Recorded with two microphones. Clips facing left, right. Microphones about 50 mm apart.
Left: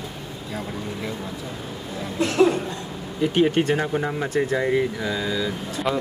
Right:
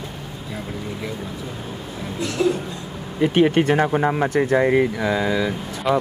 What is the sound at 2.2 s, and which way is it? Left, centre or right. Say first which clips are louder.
Speech: left 3 dB; left.